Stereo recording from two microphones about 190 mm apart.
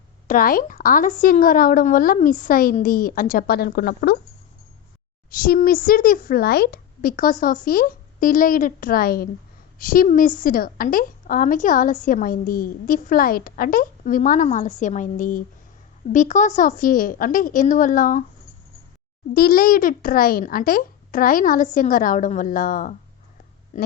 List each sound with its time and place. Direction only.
0.3 s a woman's voice: 50° left (ahead or behind)
5.4 s a woman's voice: 50° left (ahead or behind)
19.3 s a woman's voice: 50° left (ahead or behind)
23.7 s oink: 40° left (ahead or behind)